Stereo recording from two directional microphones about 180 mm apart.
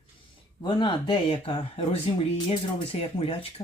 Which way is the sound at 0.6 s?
25° left (ahead or behind).